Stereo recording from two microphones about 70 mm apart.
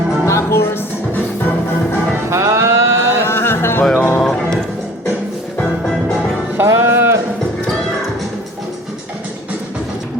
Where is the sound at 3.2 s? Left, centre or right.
Left.